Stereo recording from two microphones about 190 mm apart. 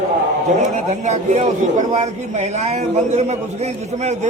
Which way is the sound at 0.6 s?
40° right (ahead or behind).